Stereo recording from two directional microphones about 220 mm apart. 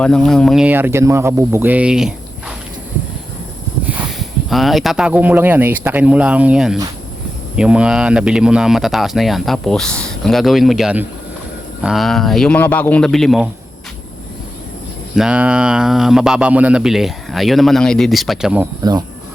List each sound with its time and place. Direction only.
0.0 s speech: 5° left (ahead or behind)
3.8 s speech: centre (ahead or behind)
15.1 s speech: 5° right (ahead or behind)
18.8 s speech: 20° right (ahead or behind)